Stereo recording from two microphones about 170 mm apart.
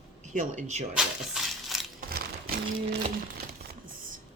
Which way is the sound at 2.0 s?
60° right (ahead or behind).